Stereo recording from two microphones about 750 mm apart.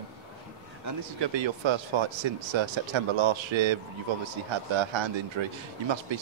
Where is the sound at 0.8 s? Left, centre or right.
Right.